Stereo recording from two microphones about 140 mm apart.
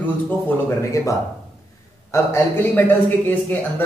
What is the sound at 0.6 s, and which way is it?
Speech, 20° left (ahead or behind).